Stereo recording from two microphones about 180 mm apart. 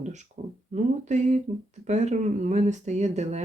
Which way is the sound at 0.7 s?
40° right (ahead or behind).